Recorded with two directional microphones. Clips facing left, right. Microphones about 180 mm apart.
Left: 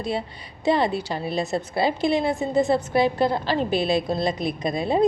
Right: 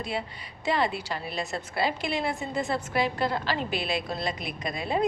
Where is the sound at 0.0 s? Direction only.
35° left (ahead or behind).